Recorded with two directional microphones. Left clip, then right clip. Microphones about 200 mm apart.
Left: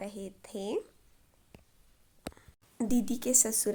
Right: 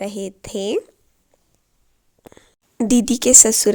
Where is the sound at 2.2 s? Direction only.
40° right (ahead or behind).